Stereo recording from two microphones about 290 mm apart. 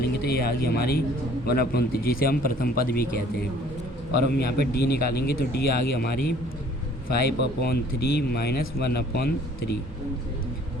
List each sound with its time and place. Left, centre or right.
0.0 s speech: left
4.3 s speech: left